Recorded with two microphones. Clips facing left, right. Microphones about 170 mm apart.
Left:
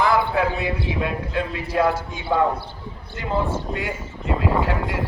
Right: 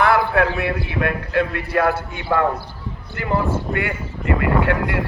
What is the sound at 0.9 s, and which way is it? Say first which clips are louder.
A man's voice: right 2 dB; 65° right (ahead or behind).